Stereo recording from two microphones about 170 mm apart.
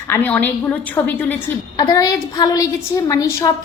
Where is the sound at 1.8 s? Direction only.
20° left (ahead or behind).